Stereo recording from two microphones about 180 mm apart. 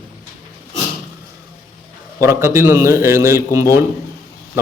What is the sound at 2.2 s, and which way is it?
Speech, 15° right (ahead or behind).